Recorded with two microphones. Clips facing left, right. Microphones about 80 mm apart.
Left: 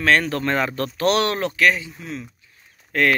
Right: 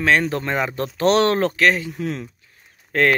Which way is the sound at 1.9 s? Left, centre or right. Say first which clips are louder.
Right 6 dB; right.